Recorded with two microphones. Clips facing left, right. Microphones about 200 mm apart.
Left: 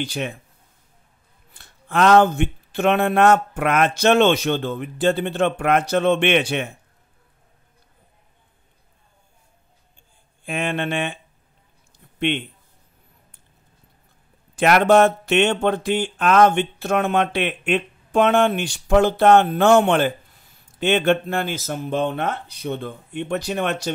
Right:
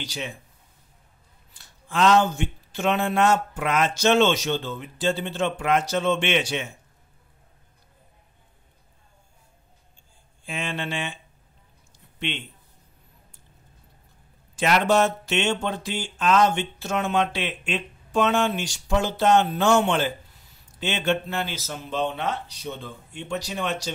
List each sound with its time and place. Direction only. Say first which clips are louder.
0.0 s speech: left 7 dB; 55° left (ahead or behind)
1.5 s speech: left 6 dB; 60° left (ahead or behind)
10.4 s speech: left 6 dB; 55° left (ahead or behind)
14.5 s speech: left 6 dB; 55° left (ahead or behind)